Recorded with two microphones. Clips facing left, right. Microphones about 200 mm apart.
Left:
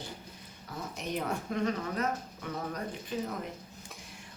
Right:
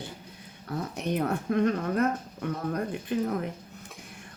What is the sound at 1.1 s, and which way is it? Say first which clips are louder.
Speech: right 7 dB; 60° right (ahead or behind).